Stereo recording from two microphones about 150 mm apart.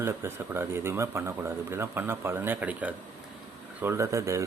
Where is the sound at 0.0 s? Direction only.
15° right (ahead or behind).